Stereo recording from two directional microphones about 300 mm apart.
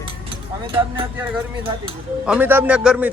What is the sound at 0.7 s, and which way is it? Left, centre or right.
Speech, centre.